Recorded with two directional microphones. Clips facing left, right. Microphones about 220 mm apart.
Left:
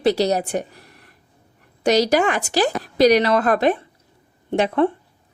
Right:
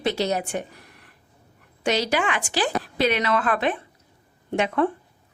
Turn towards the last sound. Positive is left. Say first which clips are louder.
# left 4 dB
turn(degrees=25)  # may be behind; listen again after turning